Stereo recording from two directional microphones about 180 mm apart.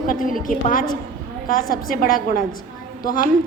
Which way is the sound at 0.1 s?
50° left (ahead or behind).